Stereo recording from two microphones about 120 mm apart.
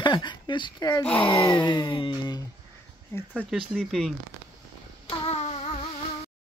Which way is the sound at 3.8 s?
Centre (ahead or behind).